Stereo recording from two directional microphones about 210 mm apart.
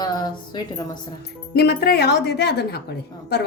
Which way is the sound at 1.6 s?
50° left (ahead or behind).